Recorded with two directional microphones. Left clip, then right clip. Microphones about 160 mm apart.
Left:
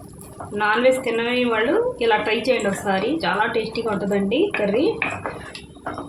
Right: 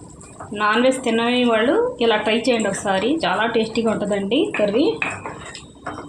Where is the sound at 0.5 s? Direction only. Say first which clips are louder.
Even; 30° right (ahead or behind).